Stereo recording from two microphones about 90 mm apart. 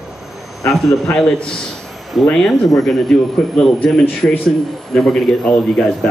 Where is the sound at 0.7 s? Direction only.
35° left (ahead or behind).